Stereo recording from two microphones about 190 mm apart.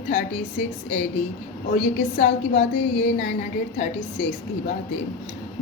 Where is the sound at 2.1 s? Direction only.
40° left (ahead or behind).